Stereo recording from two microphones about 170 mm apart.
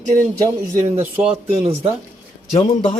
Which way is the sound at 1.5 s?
35° right (ahead or behind).